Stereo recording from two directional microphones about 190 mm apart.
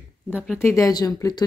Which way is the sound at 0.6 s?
15° left (ahead or behind).